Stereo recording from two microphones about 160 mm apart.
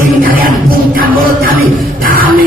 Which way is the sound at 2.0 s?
65° right (ahead or behind).